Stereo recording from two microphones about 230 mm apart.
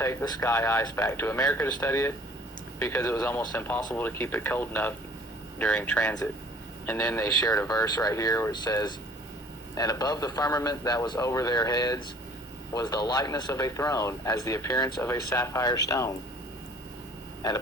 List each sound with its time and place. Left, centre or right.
0.0 s a man's voice: centre